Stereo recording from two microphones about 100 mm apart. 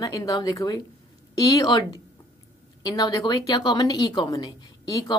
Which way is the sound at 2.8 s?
40° left (ahead or behind).